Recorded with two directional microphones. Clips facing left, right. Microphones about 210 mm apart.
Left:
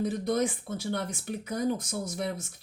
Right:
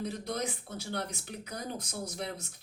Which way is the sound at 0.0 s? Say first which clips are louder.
Left 8 dB; 50° left (ahead or behind).